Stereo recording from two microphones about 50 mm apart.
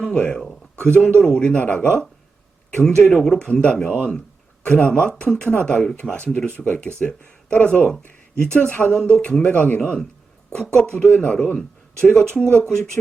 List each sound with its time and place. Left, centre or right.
0.0 s a sound: centre
1.2 s speech: left
3.1 s speech: centre; by 8.6 s left
8.8 s speech: centre
9.0 s speech: centre
9.8 s speech: centre